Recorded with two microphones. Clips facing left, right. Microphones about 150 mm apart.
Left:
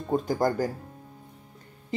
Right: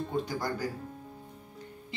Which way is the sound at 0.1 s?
45° left (ahead or behind).